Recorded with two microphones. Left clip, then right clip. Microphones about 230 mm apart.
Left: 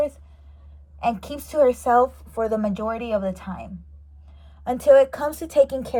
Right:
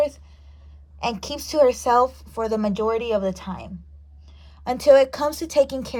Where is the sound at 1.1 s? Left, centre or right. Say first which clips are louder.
Right 1 dB; centre.